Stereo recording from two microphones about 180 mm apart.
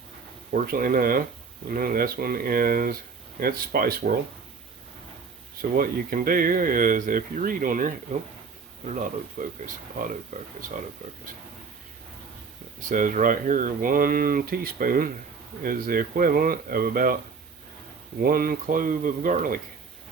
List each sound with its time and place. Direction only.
0.5 s speech: 55° right (ahead or behind)
5.7 s speech: 50° right (ahead or behind)
9.0 s speech: 45° right (ahead or behind)
12.8 s speech: 50° right (ahead or behind)
18.2 s speech: 55° right (ahead or behind)